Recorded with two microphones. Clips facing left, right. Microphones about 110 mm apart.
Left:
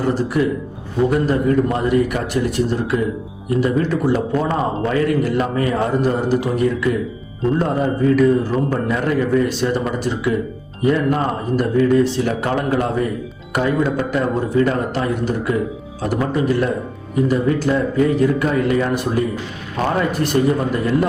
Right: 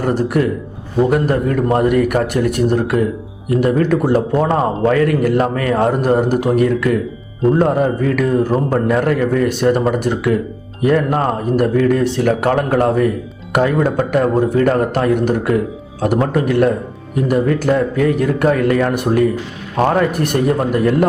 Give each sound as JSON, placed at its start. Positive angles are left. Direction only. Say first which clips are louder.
{"t": 0.0, "sound": "speech", "louder": "right 2 dB", "side_deg": -55}